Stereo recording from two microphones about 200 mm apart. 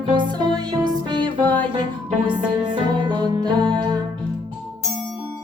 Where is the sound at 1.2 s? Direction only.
10° left (ahead or behind).